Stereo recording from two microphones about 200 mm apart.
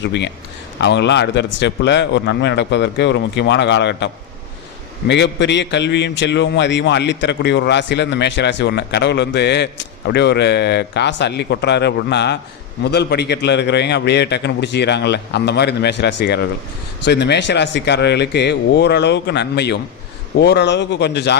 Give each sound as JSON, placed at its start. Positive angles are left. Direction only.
{"t": 0.0, "sound": "a man's voice", "side_deg": 60}